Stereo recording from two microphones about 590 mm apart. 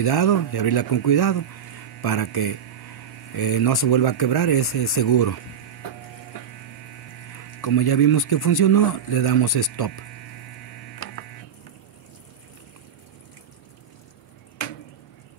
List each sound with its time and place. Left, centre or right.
0.0 s speech: left
7.6 s speech: left